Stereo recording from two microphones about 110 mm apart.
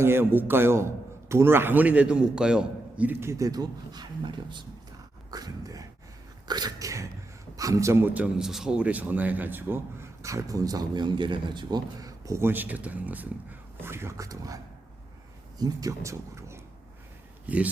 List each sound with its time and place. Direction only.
0.0 s a man's voice: 20° right (ahead or behind); by 4.6 s 45° right (ahead or behind)
5.3 s a man's voice: 35° right (ahead or behind)
17.4 s speech: 15° right (ahead or behind)